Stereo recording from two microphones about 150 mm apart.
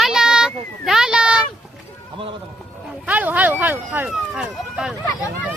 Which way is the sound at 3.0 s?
10° right (ahead or behind).